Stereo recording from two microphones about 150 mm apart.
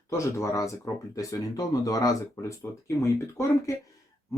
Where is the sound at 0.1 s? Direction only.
20° left (ahead or behind).